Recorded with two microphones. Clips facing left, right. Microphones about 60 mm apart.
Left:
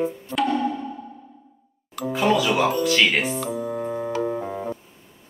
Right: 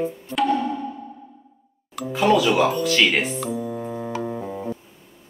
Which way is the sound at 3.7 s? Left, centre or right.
Left.